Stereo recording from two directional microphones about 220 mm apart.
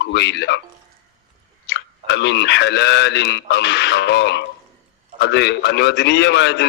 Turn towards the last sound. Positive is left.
turn(degrees=50)  # may be behind; listen again after turning